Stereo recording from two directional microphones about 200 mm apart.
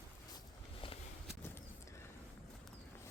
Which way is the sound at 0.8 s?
25° left (ahead or behind).